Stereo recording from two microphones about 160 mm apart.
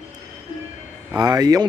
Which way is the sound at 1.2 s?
25° right (ahead or behind).